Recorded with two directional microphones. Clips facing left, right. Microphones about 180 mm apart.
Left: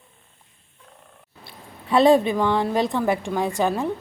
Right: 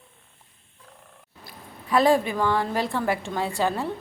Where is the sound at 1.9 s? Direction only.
25° left (ahead or behind).